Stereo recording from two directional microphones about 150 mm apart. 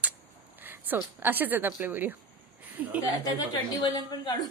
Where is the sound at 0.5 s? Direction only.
10° right (ahead or behind).